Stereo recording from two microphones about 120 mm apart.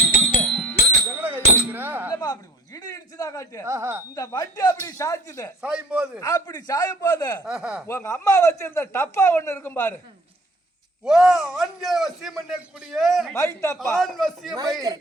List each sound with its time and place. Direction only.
0.0 s music: 15° left (ahead or behind)
1.1 s music: 20° right (ahead or behind)
1.7 s chink: 15° right (ahead or behind)
2.1 s a man's voice: 35° left (ahead or behind)
3.7 s speech: 25° right (ahead or behind)
4.1 s a man's voice: 30° left (ahead or behind)
5.6 s a man's voice: 10° right (ahead or behind)
6.1 s a man's voice: 30° left (ahead or behind)
7.4 s a man's voice: 5° right (ahead or behind)
7.9 s speech: 25° left (ahead or behind)
11.0 s a man's voice: 5° right (ahead or behind)
13.3 s speech: 25° left (ahead or behind)
13.7 s a man's voice: centre (ahead or behind)